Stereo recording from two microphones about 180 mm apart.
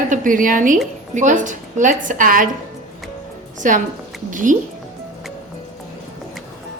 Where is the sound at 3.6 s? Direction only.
45° right (ahead or behind).